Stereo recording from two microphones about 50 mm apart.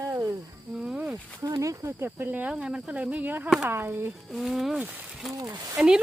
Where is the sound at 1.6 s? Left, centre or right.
Right.